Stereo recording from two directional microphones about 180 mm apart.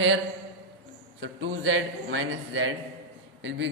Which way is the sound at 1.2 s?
80° right.